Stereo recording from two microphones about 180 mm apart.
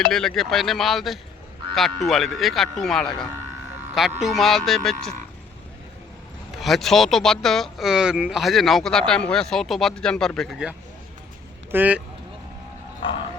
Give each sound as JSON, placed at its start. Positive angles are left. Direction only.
{"t": 0.0, "sound": "speech", "side_deg": 0}
{"t": 6.6, "sound": "speech", "side_deg": 0}